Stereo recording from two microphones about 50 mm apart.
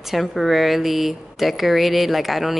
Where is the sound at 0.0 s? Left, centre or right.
Centre.